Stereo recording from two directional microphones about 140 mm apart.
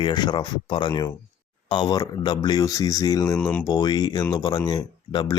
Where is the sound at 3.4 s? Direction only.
10° left (ahead or behind).